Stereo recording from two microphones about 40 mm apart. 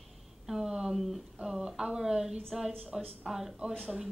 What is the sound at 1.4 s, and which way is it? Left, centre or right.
A woman's voice, centre.